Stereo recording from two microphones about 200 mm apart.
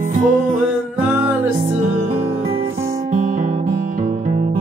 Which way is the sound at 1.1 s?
10° right (ahead or behind).